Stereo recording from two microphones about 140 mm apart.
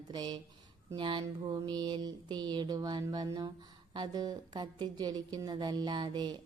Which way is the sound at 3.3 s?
30° right (ahead or behind).